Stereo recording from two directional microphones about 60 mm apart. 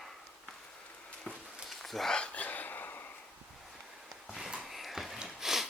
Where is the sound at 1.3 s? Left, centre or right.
Centre.